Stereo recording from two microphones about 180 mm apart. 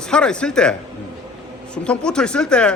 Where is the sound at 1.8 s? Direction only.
5° left (ahead or behind).